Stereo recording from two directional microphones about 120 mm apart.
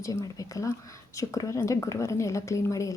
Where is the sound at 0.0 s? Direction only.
25° left (ahead or behind).